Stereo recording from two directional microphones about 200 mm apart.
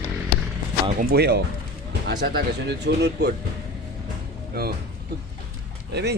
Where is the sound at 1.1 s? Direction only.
55° right (ahead or behind).